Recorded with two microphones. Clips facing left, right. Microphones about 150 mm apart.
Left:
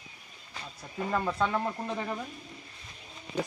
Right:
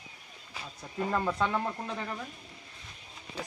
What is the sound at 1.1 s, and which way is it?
Stir, centre (ahead or behind).